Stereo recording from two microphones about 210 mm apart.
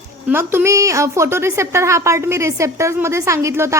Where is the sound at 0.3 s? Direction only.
10° right (ahead or behind).